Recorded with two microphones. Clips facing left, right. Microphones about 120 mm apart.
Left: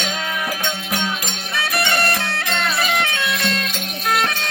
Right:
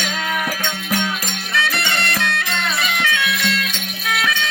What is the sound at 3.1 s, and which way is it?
Music, 30° left (ahead or behind).